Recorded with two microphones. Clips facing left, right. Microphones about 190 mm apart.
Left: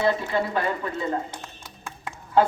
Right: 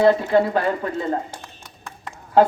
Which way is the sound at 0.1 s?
45° right (ahead or behind).